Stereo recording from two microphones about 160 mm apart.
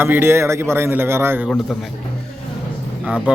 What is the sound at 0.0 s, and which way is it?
A man's voice, 15° right (ahead or behind).